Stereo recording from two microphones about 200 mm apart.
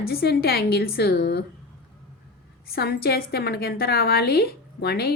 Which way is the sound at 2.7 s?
50° left (ahead or behind).